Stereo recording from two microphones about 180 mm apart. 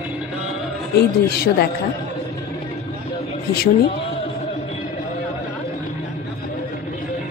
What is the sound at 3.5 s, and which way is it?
Speech, 60° left (ahead or behind).